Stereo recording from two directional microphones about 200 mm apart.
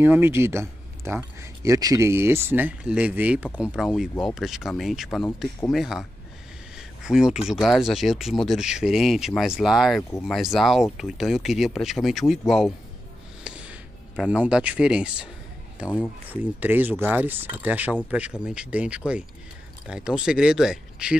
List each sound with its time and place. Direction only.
0.0 s speech: 10° right (ahead or behind)
13.4 s a sound: 5° right (ahead or behind)
15.8 s speech: 5° right (ahead or behind)